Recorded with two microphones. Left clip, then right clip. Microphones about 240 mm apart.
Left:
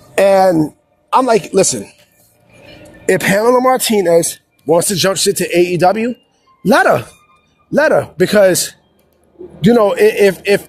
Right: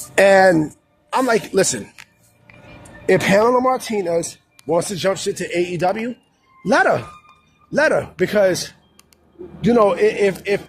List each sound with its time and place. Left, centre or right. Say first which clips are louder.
0.2 s a man's voice: left 2 dB; left
3.1 s speech: left 3 dB; left